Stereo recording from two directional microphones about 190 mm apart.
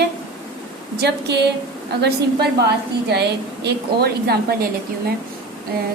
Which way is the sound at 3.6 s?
55° right (ahead or behind).